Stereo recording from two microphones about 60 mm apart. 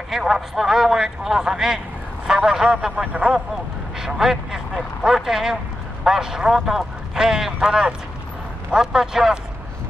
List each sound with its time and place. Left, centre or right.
0.1 s a man's voice: centre